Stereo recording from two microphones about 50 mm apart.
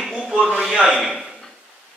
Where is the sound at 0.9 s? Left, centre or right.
Centre.